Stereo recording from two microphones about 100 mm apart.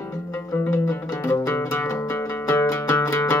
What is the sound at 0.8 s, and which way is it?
Music, 20° left (ahead or behind).